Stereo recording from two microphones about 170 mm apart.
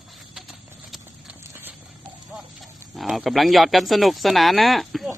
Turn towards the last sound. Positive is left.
turn(degrees=0)  # may be behind; listen again after turning